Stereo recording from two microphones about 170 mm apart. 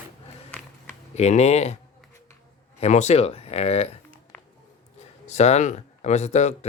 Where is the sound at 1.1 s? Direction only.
40° left (ahead or behind).